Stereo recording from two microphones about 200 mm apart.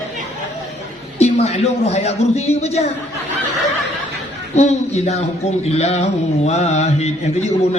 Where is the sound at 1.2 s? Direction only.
30° left (ahead or behind).